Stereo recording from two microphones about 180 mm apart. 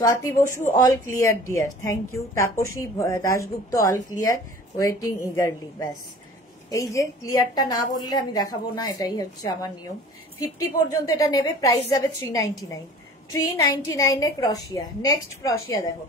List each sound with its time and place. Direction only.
0.0 s a woman's voice: 15° left (ahead or behind)
13.8 s a woman's voice: 20° left (ahead or behind)